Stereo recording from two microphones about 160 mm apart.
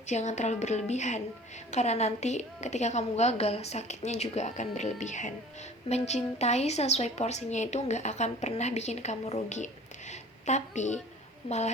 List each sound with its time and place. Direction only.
0.1 s a woman's voice: 45° left (ahead or behind)
10.1 s a sound: 45° left (ahead or behind)
11.4 s a woman's voice: 45° left (ahead or behind)